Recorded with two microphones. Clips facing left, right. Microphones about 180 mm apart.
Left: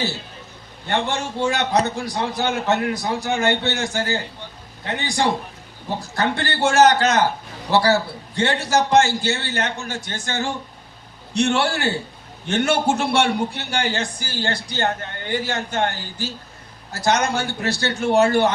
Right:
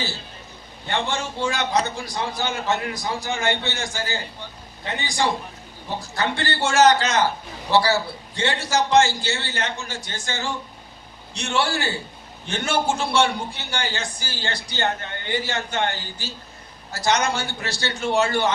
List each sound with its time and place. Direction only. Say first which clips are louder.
0.9 s a man's voice: left 3 dB; 65° left (ahead or behind)